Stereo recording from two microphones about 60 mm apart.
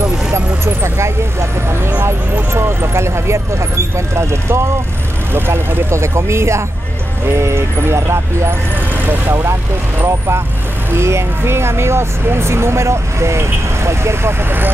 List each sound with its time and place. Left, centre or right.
1.7 s vehicle: right
2.5 s speech: right